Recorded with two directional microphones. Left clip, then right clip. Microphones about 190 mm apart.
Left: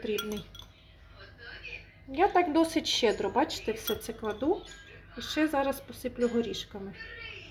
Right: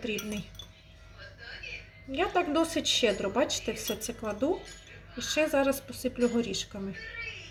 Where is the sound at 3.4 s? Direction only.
25° left (ahead or behind).